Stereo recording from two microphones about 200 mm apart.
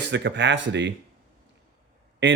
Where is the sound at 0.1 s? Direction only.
60° right (ahead or behind).